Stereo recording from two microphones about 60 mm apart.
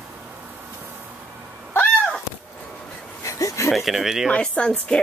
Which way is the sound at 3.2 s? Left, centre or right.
Left.